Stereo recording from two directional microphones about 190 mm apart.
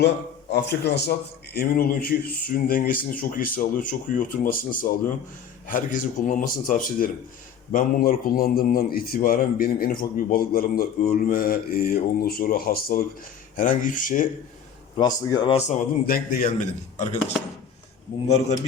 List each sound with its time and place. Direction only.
0.5 s a man's voice: 60° left (ahead or behind)
1.5 s speech: 50° left (ahead or behind)
14.9 s speech: 20° left (ahead or behind)
15.5 s speech: 40° left (ahead or behind)
17.0 s speech: 35° left (ahead or behind)